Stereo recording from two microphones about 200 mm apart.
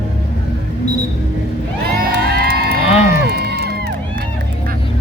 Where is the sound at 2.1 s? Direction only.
55° right (ahead or behind).